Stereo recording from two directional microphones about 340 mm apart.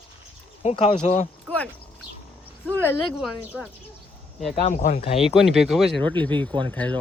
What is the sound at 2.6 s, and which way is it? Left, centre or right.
Speech, centre.